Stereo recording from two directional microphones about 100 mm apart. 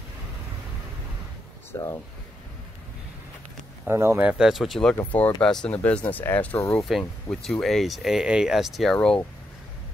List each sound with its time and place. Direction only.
1.7 s speech: 30° left (ahead or behind)
3.8 s speech: 25° right (ahead or behind)
4.2 s speech: 10° right (ahead or behind); by 6.6 s 15° left (ahead or behind)
6.7 s speech: 5° left (ahead or behind)
8.9 s speech: 10° left (ahead or behind)